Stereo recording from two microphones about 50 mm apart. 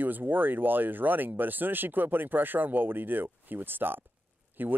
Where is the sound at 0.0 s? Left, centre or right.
Right.